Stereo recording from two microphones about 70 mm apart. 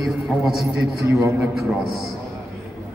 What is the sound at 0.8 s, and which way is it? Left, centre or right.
Speech, right.